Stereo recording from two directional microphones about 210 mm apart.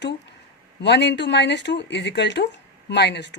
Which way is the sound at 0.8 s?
55° left (ahead or behind).